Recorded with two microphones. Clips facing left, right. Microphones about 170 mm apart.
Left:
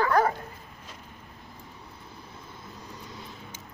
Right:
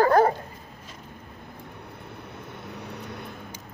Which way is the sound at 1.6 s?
60° right (ahead or behind).